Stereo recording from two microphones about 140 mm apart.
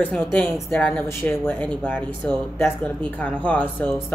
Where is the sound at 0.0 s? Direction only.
10° left (ahead or behind).